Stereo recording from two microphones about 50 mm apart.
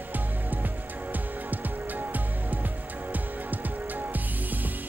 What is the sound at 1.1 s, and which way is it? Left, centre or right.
Music, right.